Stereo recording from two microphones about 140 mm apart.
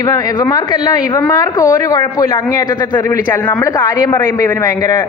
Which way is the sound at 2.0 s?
35° left (ahead or behind).